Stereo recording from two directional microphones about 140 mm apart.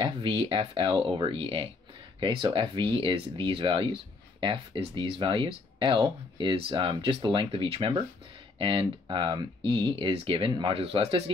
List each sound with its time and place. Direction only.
0.0 s speech: 40° right (ahead or behind)